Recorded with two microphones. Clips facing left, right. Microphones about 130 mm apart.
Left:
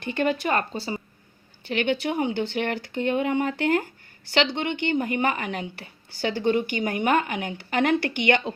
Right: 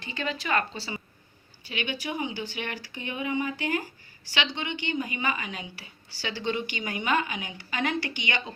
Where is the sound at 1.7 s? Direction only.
55° left (ahead or behind).